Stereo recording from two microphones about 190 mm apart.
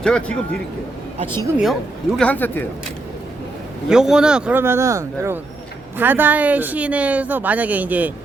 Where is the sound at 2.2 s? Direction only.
10° left (ahead or behind).